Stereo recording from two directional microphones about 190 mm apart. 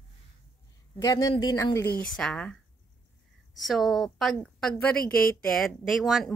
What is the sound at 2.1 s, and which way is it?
Speech, 5° left (ahead or behind).